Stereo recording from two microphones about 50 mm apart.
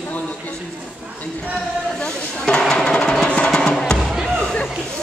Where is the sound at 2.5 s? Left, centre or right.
Centre.